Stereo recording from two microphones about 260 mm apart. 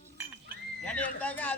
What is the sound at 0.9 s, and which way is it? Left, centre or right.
Speech, centre.